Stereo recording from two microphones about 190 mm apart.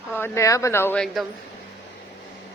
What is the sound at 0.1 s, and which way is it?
Speech, 15° left (ahead or behind).